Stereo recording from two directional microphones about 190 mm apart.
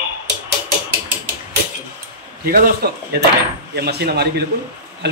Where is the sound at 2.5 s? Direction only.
50° right (ahead or behind).